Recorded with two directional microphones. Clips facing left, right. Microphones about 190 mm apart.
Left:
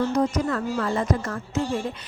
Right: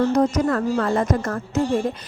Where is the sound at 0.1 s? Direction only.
45° right (ahead or behind).